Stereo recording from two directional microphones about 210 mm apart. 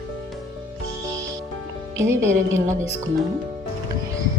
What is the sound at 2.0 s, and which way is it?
Speech, 10° right (ahead or behind).